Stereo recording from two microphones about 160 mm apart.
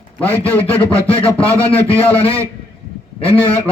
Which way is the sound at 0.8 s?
35° left (ahead or behind).